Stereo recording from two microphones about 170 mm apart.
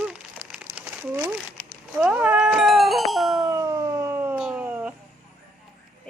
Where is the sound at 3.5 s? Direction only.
20° right (ahead or behind).